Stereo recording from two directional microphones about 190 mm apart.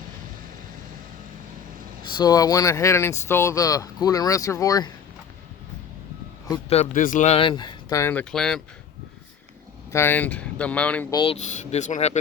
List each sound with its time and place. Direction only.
2.1 s speech: 20° left (ahead or behind)
6.7 s speech: 40° left (ahead or behind); by 8.6 s 5° left (ahead or behind)
9.9 s speech: 10° left (ahead or behind)
11.1 s speech: 25° left (ahead or behind)
11.3 s speech: 40° left (ahead or behind)